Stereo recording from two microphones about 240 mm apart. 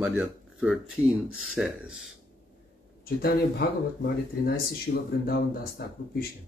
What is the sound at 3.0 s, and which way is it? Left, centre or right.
Speech, left.